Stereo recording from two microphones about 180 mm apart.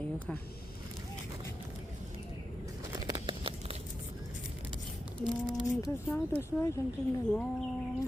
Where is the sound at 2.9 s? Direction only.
25° right (ahead or behind).